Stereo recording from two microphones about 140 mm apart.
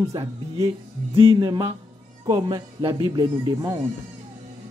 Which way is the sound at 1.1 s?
35° right (ahead or behind).